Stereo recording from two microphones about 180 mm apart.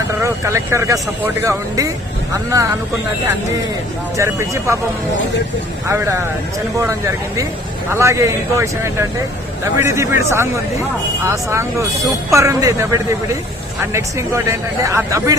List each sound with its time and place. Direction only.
0.2 s speech: 15° right (ahead or behind)
4.2 s speech: 15° right (ahead or behind)
5.9 s speech: 15° right (ahead or behind)
7.9 s speech: 15° right (ahead or behind)